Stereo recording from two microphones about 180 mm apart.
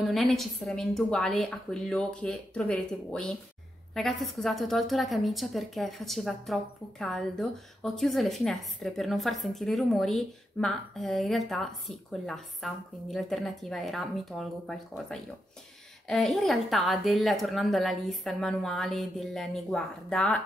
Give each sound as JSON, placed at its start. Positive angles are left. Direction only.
{"t": 0.0, "sound": "a woman's voice", "side_deg": 0}